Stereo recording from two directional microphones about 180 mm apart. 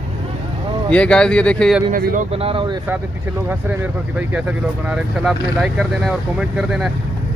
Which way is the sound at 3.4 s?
10° right (ahead or behind).